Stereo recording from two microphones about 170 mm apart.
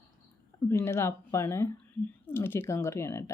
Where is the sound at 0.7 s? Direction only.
15° left (ahead or behind).